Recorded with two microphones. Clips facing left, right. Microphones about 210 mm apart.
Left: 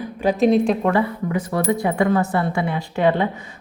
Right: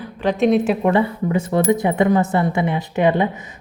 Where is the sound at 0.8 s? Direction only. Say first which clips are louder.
Right 2 dB; 25° right (ahead or behind).